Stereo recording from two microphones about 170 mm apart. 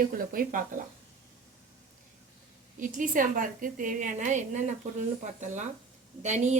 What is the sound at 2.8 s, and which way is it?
A woman's voice, 50° right (ahead or behind).